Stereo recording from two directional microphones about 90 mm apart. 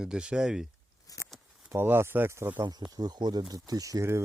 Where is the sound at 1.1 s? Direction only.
40° left (ahead or behind).